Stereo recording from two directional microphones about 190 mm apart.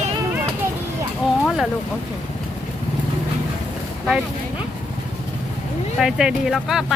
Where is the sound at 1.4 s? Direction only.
Centre (ahead or behind).